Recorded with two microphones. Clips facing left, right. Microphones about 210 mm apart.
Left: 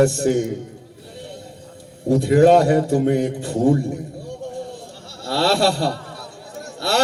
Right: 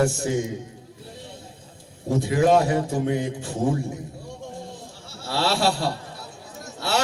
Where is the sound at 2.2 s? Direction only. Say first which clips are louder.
Left 6 dB; 60° left (ahead or behind).